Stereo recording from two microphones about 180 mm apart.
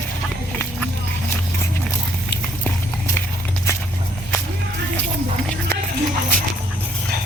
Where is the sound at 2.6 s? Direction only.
10° left (ahead or behind).